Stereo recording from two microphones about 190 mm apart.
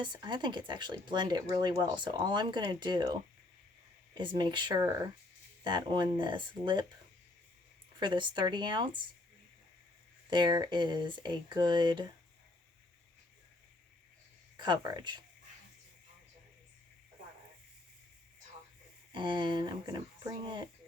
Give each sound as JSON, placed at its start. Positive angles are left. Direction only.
{"t": 0.0, "sound": "speech", "side_deg": -25}
{"t": 7.9, "sound": "speech", "side_deg": -25}
{"t": 10.2, "sound": "speech", "side_deg": -25}
{"t": 14.5, "sound": "speech", "side_deg": -25}
{"t": 19.1, "sound": "speech", "side_deg": -25}